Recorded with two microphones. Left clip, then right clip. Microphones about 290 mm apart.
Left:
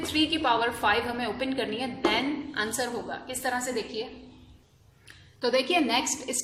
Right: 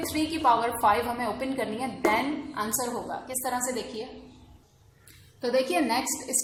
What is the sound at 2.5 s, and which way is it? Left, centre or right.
A woman's voice, left.